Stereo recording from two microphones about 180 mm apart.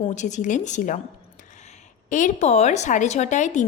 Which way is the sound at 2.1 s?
45° left (ahead or behind).